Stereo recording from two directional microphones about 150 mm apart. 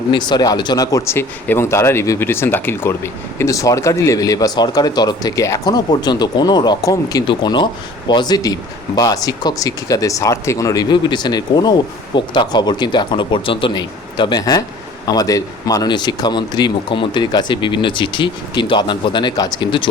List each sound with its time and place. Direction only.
0.1 s speech: 30° left (ahead or behind)